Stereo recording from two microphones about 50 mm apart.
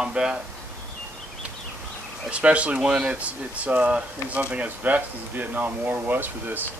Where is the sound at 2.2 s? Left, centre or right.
Right.